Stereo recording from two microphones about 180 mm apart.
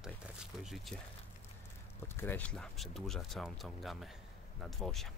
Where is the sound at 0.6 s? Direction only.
Centre (ahead or behind).